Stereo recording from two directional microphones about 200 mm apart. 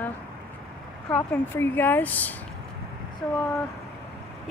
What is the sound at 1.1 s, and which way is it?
Speech, 10° left (ahead or behind).